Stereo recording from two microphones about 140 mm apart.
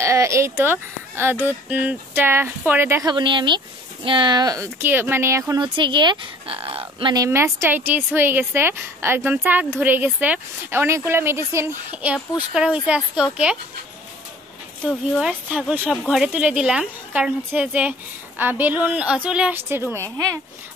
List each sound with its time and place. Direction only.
0.0 s a woman's voice: 20° right (ahead or behind)
3.1 s speech: 35° right (ahead or behind)
5.6 s speech: 35° right (ahead or behind)
7.2 s a woman's voice: 20° right (ahead or behind)
14.9 s a woman's voice: 5° right (ahead or behind)